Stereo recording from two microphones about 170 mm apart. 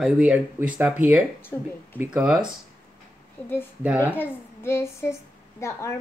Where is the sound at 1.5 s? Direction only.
15° left (ahead or behind).